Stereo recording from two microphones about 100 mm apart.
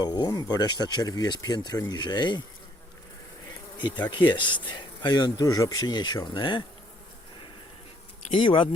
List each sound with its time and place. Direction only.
0.0 s speech: 45° left (ahead or behind)
4.1 s speech: 55° left (ahead or behind)
6.3 s insect: 55° left (ahead or behind)
8.4 s insect: 55° left (ahead or behind)